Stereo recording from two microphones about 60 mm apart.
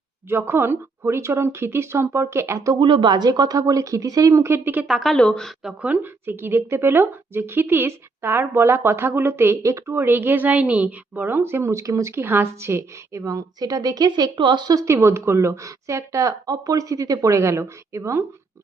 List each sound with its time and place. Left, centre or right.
0.3 s speech: right
3.2 s speech: right
4.4 s speech: right
4.9 s a woman's voice: centre
5.1 s a woman's voice: centre
5.8 s a woman's voice: right
10.4 s a woman's voice: right
11.3 s speech: right
12.2 s a woman's voice: right
12.5 s a woman's voice: right
15.0 s speech: right